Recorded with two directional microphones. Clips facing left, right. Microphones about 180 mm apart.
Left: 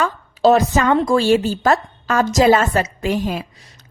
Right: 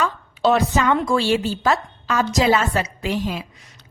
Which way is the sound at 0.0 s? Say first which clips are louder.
Left 4 dB; 45° left (ahead or behind).